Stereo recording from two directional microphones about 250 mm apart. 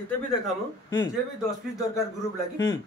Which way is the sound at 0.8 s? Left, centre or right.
Centre.